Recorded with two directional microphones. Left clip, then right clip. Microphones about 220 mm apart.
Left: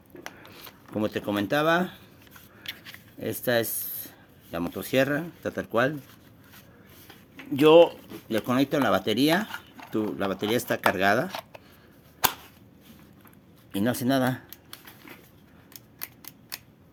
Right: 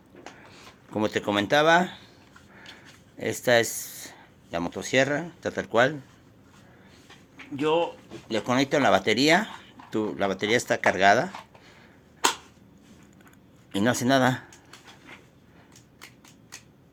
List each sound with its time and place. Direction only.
0.9 s speech: 10° left (ahead or behind)
3.2 s speech: 10° left (ahead or behind)
7.5 s speech: 50° left (ahead or behind)
8.3 s speech: 25° left (ahead or behind)
13.7 s speech: 5° left (ahead or behind)